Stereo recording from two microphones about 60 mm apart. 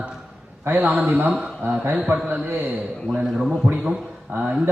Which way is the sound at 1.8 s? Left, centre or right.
Right.